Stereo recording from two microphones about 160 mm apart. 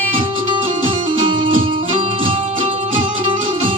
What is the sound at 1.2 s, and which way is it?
Music, 30° right (ahead or behind).